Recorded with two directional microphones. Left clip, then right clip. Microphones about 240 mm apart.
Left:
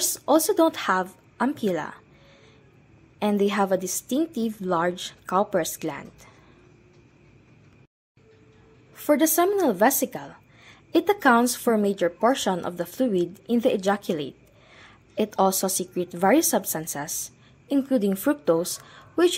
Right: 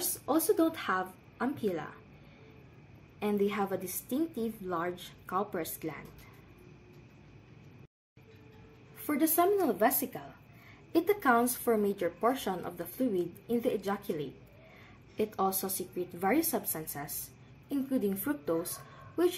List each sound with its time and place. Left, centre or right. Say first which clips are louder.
0.2 s a woman's voice: left 8 dB; left
3.2 s a woman's voice: left 8 dB; left
9.0 s a woman's voice: left 8 dB; left